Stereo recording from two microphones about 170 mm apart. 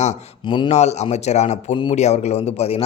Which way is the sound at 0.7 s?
40° left (ahead or behind).